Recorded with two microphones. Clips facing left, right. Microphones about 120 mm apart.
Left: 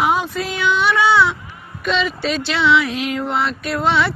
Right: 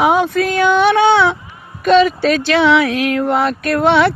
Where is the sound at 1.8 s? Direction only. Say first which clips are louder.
Right 10 dB; 45° right (ahead or behind).